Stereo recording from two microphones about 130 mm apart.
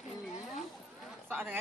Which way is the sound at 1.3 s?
15° right (ahead or behind).